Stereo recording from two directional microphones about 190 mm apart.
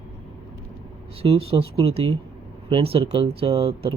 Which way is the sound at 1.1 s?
30° right (ahead or behind).